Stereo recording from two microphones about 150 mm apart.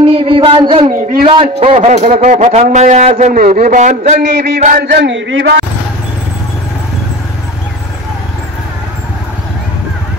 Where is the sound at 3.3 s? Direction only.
75° right (ahead or behind); by 4.6 s 90° right.